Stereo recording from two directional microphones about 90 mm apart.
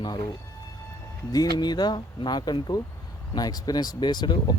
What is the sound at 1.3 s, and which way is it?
Speech, 50° left (ahead or behind).